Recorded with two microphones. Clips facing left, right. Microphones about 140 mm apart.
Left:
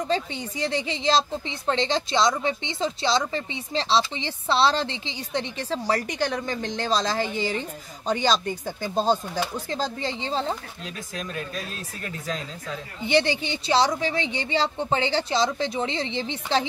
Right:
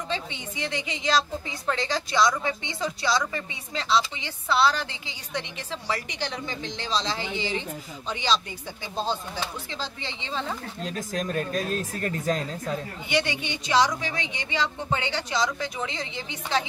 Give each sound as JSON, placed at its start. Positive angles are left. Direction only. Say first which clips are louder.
{"t": 0.1, "sound": "a woman's voice", "louder": "left 6 dB", "side_deg": 35}
{"t": 10.8, "sound": "speech", "louder": "right 5 dB", "side_deg": -40}
{"t": 13.0, "sound": "a woman's voice", "louder": "left 7 dB", "side_deg": 30}